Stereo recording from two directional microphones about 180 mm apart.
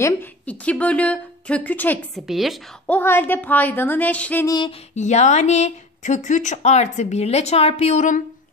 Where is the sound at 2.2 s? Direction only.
Centre (ahead or behind).